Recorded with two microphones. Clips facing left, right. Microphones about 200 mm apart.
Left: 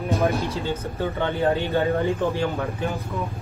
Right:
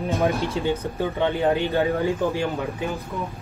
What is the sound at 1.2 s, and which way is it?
Speech, 15° right (ahead or behind).